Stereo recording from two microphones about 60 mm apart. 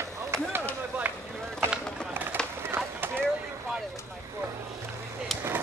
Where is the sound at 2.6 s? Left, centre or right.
Right.